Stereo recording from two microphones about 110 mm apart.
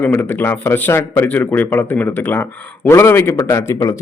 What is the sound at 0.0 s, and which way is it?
A man's voice, 20° left (ahead or behind).